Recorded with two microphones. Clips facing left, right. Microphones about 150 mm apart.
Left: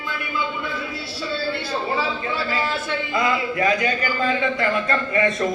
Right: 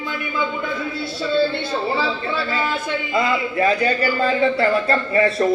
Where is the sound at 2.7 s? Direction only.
25° right (ahead or behind).